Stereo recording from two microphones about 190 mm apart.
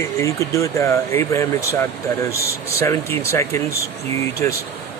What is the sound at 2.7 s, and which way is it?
Speech, 15° left (ahead or behind).